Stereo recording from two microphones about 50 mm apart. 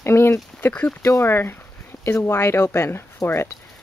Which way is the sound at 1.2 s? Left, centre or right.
Left.